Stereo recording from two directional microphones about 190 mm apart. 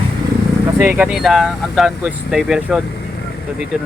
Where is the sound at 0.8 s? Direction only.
10° right (ahead or behind).